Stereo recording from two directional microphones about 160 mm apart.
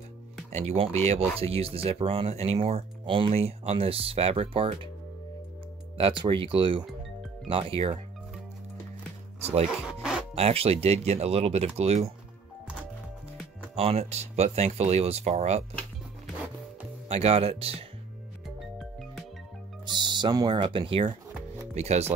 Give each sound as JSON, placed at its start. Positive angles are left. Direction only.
{"t": 0.5, "sound": "speech", "side_deg": -45}
{"t": 5.9, "sound": "speech", "side_deg": -35}
{"t": 10.3, "sound": "speech", "side_deg": -40}
{"t": 13.7, "sound": "speech", "side_deg": -40}
{"t": 17.1, "sound": "speech", "side_deg": -40}
{"t": 19.9, "sound": "speech", "side_deg": -30}
{"t": 21.7, "sound": "speech", "side_deg": -45}